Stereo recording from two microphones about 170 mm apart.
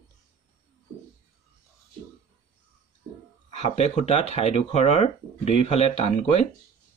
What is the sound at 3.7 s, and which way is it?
Speech, 40° left (ahead or behind).